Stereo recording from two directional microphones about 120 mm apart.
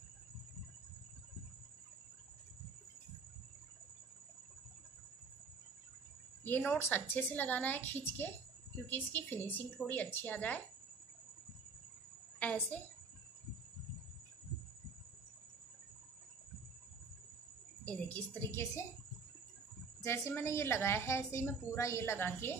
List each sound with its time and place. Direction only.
6.4 s a woman's voice: 15° left (ahead or behind)
12.4 s a woman's voice: 10° left (ahead or behind)
18.1 s a woman's voice: 10° left (ahead or behind)
20.0 s a woman's voice: 20° left (ahead or behind)